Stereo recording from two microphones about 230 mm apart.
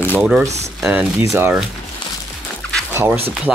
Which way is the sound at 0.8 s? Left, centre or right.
Centre.